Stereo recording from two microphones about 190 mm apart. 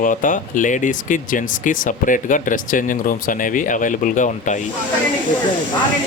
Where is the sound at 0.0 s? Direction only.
45° left (ahead or behind).